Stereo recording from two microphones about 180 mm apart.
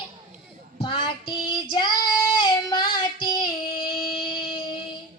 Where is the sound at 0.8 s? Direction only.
25° left (ahead or behind).